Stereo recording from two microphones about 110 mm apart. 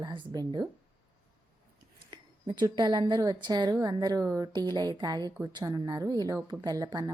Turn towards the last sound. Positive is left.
turn(degrees=-35)  # may be behind; listen again after turning